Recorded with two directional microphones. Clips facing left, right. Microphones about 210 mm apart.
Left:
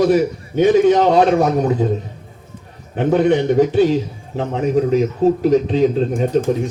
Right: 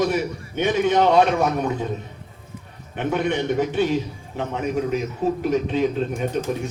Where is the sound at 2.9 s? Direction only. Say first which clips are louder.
Left 8 dB; 35° left (ahead or behind).